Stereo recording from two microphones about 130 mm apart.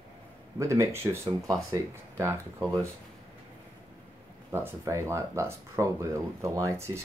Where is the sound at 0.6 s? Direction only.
25° right (ahead or behind).